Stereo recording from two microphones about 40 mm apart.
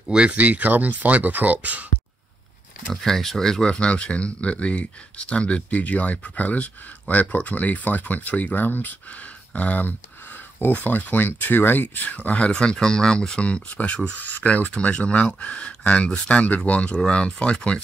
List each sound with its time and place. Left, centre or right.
0.3 s speech: right
2.9 s speech: centre; by 8.9 s left
9.5 s speech: left
10.6 s speech: left
11.0 s speech: left
12.4 s speech: left
13.8 s speech: left
14.2 s speech: left
14.7 s speech: left